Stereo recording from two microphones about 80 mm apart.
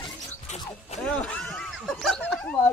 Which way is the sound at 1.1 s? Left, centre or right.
Centre.